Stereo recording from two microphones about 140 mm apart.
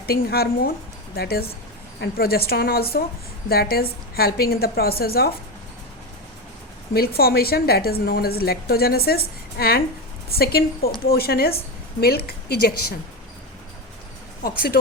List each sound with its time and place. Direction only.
0.0 s a woman's voice: 90° left
6.9 s a woman's voice: 90° left
14.4 s a woman's voice: 90° left